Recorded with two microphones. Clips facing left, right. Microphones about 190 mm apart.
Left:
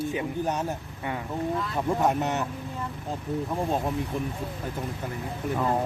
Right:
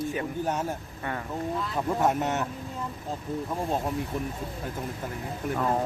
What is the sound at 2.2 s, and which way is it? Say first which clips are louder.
Speech: even; 10° left (ahead or behind).